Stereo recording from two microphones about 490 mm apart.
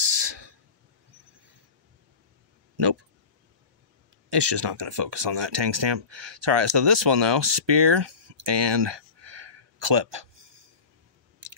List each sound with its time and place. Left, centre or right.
0.0 s a sound: right
4.3 s speech: right
11.4 s chewing: right